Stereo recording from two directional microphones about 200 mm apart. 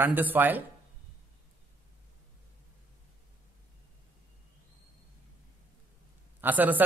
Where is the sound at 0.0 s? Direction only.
10° right (ahead or behind).